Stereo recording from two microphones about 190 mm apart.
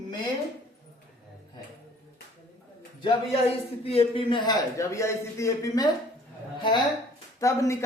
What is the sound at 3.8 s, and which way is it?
A man's voice, 30° left (ahead or behind).